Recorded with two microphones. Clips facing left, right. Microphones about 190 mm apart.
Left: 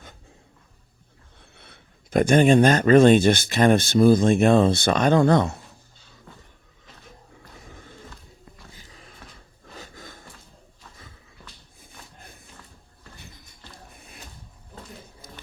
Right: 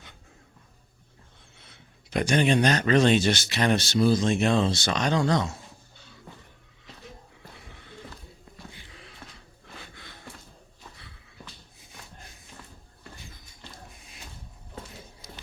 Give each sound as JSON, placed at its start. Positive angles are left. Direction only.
{"t": 1.5, "sound": "speech", "side_deg": 60}
{"t": 7.5, "sound": "skateboard", "side_deg": 45}
{"t": 8.7, "sound": "a sound", "side_deg": 40}
{"t": 9.7, "sound": "gasp", "side_deg": 40}
{"t": 11.8, "sound": "wheeze", "side_deg": 55}
{"t": 15.2, "sound": "a sound", "side_deg": 50}